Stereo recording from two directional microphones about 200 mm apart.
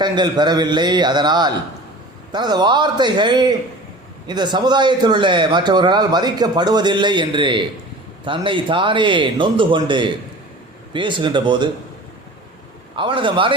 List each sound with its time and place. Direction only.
0.0 s a man's voice: 20° right (ahead or behind)
13.0 s a man's voice: 25° right (ahead or behind)